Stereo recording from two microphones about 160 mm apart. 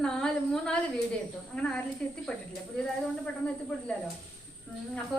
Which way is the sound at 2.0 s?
5° left (ahead or behind).